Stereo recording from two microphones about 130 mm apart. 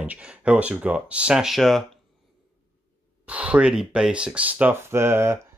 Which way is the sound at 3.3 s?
10° right (ahead or behind).